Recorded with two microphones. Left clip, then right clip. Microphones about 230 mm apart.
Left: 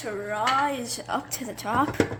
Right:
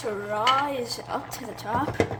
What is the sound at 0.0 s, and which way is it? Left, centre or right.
Speech, centre.